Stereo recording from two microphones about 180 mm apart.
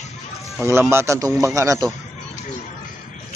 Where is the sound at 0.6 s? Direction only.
15° right (ahead or behind).